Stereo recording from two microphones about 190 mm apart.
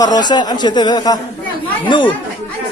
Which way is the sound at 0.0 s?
20° left (ahead or behind).